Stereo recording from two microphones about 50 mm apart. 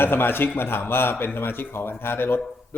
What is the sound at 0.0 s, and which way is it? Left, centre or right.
A man's voice, left.